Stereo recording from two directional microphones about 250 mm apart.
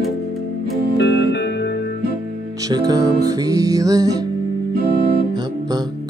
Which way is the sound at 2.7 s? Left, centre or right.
Centre.